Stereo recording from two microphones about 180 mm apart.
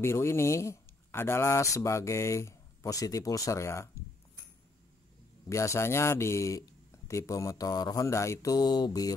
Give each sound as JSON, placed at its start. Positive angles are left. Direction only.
{"t": 0.0, "sound": "speech", "side_deg": 15}
{"t": 5.5, "sound": "speech", "side_deg": 15}